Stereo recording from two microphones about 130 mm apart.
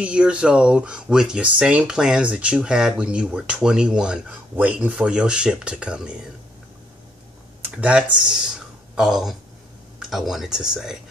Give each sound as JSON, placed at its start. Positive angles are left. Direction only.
{"t": 0.0, "sound": "speech", "side_deg": -10}
{"t": 7.6, "sound": "speech", "side_deg": -10}